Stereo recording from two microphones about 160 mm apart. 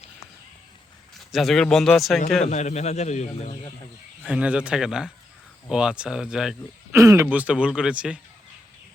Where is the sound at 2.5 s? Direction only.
45° left (ahead or behind).